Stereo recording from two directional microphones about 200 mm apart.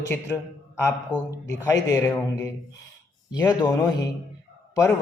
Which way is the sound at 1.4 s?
15° left (ahead or behind).